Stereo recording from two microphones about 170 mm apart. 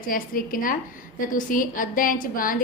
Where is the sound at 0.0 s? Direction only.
55° left (ahead or behind).